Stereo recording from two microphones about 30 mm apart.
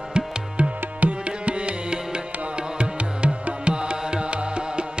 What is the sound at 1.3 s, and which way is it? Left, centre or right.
Music, right.